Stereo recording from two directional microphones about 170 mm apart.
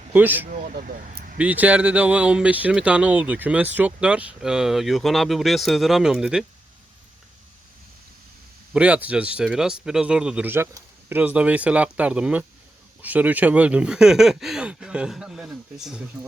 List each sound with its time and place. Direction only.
0.1 s speech: 10° right (ahead or behind)
0.5 s speech: 55° right (ahead or behind)
1.4 s speech: 10° right (ahead or behind)
8.7 s speech: 5° right (ahead or behind)